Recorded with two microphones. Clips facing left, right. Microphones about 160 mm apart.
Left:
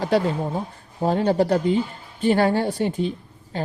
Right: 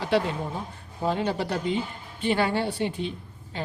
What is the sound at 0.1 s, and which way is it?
A woman's voice, 40° left (ahead or behind).